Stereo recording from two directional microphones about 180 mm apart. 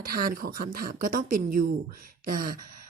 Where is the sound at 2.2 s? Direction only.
50° right (ahead or behind).